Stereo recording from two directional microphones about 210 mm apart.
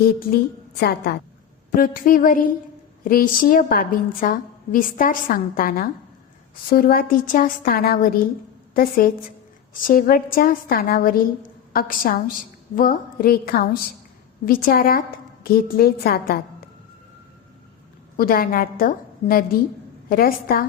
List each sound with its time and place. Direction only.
0.8 s a woman's voice: 50° left (ahead or behind)
18.2 s a woman's voice: 45° left (ahead or behind)